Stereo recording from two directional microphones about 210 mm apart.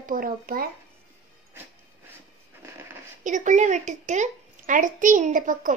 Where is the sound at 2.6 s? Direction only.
10° right (ahead or behind).